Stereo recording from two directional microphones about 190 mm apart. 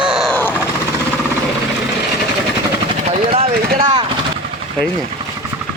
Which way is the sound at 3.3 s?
30° right (ahead or behind).